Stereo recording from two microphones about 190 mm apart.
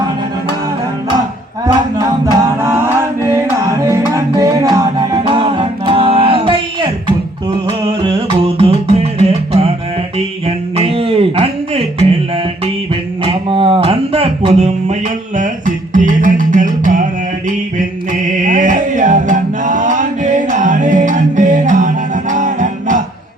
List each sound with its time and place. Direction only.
2.2 s music: 15° right (ahead or behind)
8.5 s music: 30° right (ahead or behind)
10.2 s a sound: 30° right (ahead or behind)
13.2 s a sound: 30° right (ahead or behind)
15.4 s music: 40° right (ahead or behind)
18.4 s music: 40° right (ahead or behind)